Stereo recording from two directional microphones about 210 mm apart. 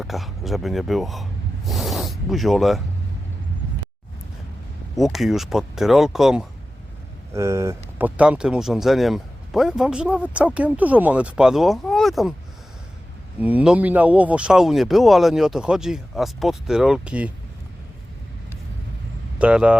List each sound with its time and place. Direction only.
0.0 s speech: centre (ahead or behind)
4.9 s speech: centre (ahead or behind)
7.3 s speech: 15° right (ahead or behind)
13.4 s speech: 5° right (ahead or behind)
19.4 s speech: 5° right (ahead or behind)